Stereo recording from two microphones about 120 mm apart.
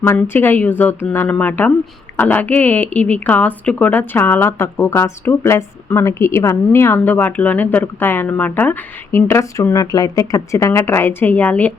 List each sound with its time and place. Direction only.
0.0 s a woman's voice: 15° left (ahead or behind)